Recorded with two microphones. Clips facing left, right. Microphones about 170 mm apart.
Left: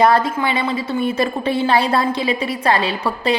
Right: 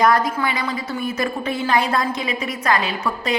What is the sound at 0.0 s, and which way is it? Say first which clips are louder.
A woman's voice: left 3 dB; 30° left (ahead or behind).